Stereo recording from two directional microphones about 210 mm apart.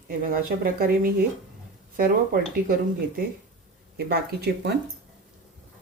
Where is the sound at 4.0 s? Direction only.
50° right (ahead or behind).